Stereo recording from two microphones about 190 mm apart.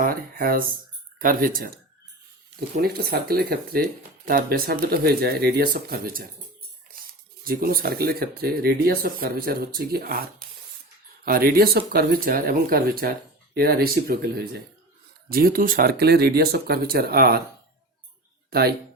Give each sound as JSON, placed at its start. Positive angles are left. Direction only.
{"t": 0.0, "sound": "speech", "side_deg": -50}
{"t": 2.8, "sound": "speech", "side_deg": -55}
{"t": 11.3, "sound": "speech", "side_deg": -50}